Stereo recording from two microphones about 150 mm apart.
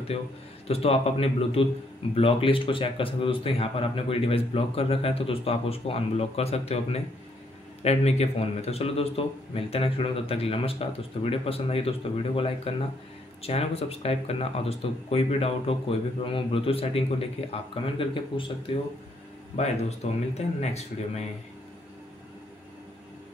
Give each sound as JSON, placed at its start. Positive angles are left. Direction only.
{"t": 0.7, "sound": "speech", "side_deg": 40}
{"t": 19.5, "sound": "speech", "side_deg": 45}